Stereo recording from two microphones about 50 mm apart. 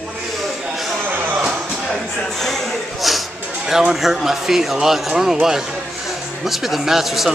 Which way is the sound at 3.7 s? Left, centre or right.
Centre.